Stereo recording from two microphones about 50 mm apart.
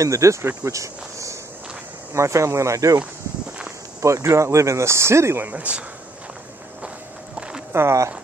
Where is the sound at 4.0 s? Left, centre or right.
Right.